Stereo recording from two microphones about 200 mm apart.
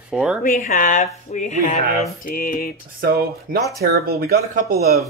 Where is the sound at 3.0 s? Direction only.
50° right (ahead or behind).